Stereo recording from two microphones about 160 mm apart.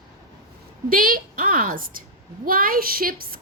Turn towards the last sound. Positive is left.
turn(degrees=-65)  # may be behind; listen again after turning